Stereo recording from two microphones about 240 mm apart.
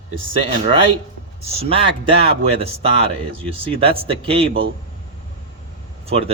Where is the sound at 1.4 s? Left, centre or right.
Right.